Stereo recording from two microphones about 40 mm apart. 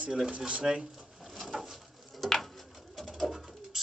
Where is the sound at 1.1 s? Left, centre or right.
Centre.